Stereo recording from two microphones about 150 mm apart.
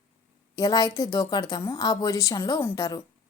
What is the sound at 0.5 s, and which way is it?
A woman's voice, 20° left (ahead or behind).